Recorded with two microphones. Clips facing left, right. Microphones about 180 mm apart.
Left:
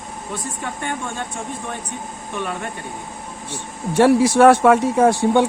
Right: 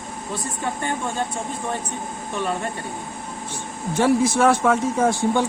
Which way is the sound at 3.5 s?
70° left (ahead or behind).